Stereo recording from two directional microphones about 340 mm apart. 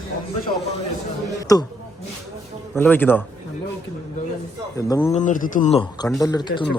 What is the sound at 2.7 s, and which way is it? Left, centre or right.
Speech, centre.